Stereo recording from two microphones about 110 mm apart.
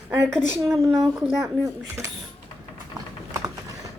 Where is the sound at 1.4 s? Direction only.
25° right (ahead or behind).